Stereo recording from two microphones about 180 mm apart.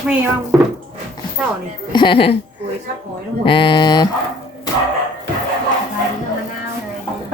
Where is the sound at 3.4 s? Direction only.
30° left (ahead or behind).